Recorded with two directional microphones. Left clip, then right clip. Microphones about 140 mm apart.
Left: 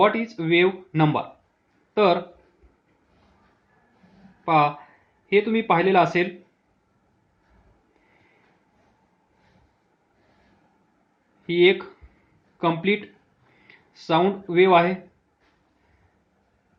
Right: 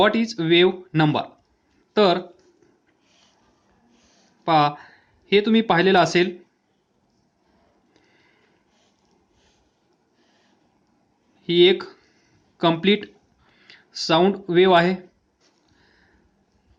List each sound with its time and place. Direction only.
0.0 s speech: 85° right
1.9 s speech: 70° right (ahead or behind)
4.4 s speech: 80° right
11.4 s speech: 70° right (ahead or behind)
12.5 s speech: 90° right
13.7 s speech: 65° right (ahead or behind); by 14.9 s 80° right